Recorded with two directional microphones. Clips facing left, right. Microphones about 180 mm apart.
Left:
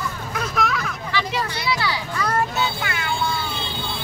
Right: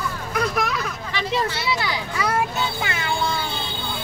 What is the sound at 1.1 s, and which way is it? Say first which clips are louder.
Vehicle: right 1 dB; 20° right (ahead or behind).